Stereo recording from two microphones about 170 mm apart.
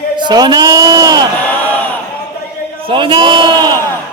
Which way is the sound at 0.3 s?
25° right (ahead or behind).